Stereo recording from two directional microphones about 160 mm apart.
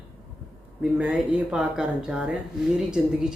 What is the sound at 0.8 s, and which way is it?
Speech, 5° right (ahead or behind).